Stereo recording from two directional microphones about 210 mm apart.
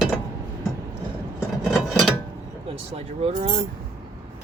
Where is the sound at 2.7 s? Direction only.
30° right (ahead or behind).